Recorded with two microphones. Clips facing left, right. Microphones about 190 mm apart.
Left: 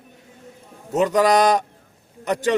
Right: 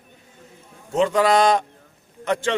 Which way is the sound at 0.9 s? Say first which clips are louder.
Left 1 dB; 40° left (ahead or behind).